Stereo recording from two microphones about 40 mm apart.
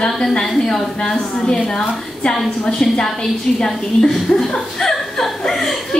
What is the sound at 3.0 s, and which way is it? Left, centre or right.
A woman's voice, centre.